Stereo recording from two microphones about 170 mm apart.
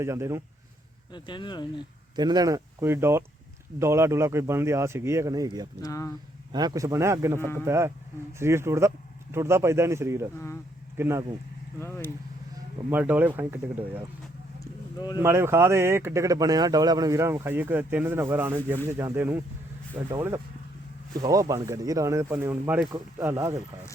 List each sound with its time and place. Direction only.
0.0 s speech: 15° right (ahead or behind)
1.1 s speech: 25° left (ahead or behind)
2.1 s speech: 25° right (ahead or behind)
5.8 s speech: 20° left (ahead or behind)
6.5 s speech: 25° right (ahead or behind)
7.3 s speech: 15° left (ahead or behind)
7.6 s speech: 15° right (ahead or behind)
10.3 s speech: 15° left (ahead or behind)
10.9 s speech: 15° right (ahead or behind)
11.8 s speech: 15° left (ahead or behind)
12.9 s speech: 10° right (ahead or behind)
14.6 s a sound: 25° left (ahead or behind)
15.2 s speech: 15° right (ahead or behind)